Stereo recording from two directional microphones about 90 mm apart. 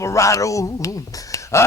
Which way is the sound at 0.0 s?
35° left (ahead or behind).